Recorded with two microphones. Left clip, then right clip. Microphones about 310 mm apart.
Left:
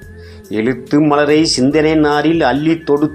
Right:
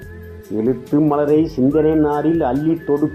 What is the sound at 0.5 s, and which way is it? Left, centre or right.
Speech, left.